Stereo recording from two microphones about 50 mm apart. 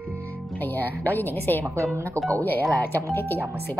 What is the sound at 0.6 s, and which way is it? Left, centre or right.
A woman's voice, left.